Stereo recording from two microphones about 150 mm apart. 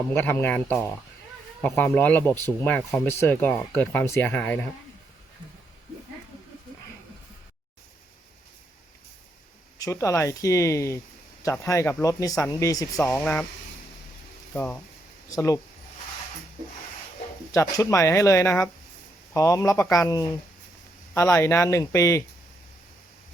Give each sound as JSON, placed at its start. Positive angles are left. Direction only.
{"t": 0.1, "sound": "speech", "side_deg": 15}
{"t": 9.7, "sound": "speech", "side_deg": 20}
{"t": 14.5, "sound": "speech", "side_deg": 10}
{"t": 15.3, "sound": "speech", "side_deg": 20}
{"t": 17.5, "sound": "speech", "side_deg": 20}